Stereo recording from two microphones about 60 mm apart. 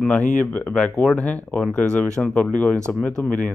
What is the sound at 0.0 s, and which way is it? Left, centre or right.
Speech, left.